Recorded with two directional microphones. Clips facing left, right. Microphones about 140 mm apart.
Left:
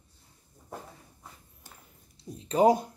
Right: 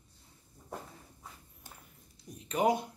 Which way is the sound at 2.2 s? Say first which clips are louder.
Left 7 dB; 30° left (ahead or behind).